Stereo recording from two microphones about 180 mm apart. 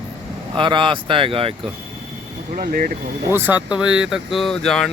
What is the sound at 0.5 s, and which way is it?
Speech, 25° right (ahead or behind).